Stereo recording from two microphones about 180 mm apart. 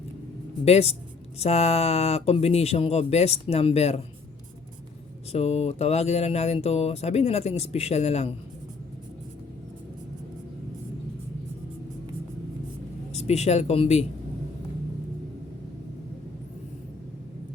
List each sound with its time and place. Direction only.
0.6 s speech: 35° left (ahead or behind)
5.3 s speech: 35° left (ahead or behind)
13.1 s speech: 35° left (ahead or behind)